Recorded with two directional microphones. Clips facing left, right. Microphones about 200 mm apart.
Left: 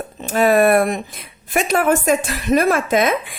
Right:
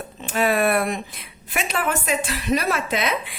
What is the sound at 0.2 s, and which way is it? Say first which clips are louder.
Speech: left 6 dB; 45° left (ahead or behind).